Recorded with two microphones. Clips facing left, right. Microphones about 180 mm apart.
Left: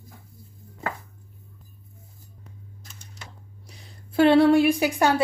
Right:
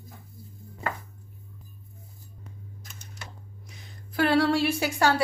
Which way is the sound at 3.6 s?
30° left (ahead or behind).